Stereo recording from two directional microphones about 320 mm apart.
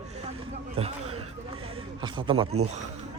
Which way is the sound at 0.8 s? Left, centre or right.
Centre.